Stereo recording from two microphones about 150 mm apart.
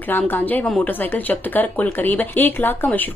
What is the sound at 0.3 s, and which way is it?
A woman's voice, 10° left (ahead or behind).